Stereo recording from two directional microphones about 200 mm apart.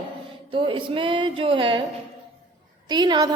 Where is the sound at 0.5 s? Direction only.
25° right (ahead or behind).